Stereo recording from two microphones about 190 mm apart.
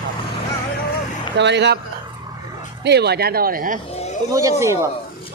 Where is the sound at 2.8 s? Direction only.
60° right (ahead or behind).